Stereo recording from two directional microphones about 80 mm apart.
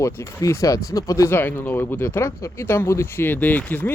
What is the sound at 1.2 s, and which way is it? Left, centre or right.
Speech, left.